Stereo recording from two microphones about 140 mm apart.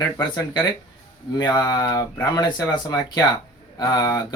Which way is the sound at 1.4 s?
30° left (ahead or behind).